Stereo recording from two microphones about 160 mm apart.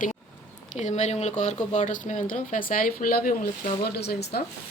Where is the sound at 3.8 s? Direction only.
85° left.